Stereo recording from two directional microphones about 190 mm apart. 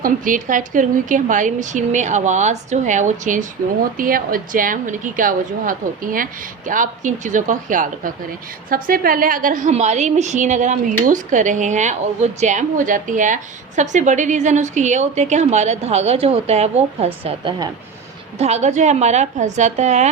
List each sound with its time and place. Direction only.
0.0 s a woman's voice: 45° right (ahead or behind)